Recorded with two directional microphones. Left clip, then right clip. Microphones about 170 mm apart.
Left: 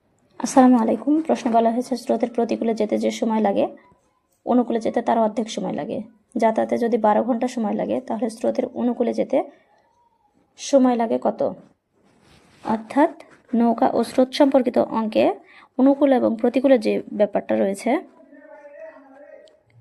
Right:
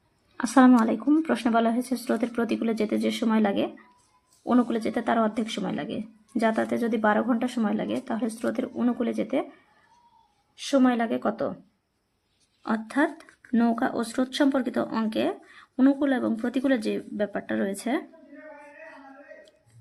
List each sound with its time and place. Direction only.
0.5 s a woman's voice: 5° left (ahead or behind)
10.7 s a woman's voice: 15° left (ahead or behind)
12.7 s a woman's voice: 20° left (ahead or behind)
15.7 s speech: 10° left (ahead or behind)
16.0 s a woman's voice: 20° left (ahead or behind)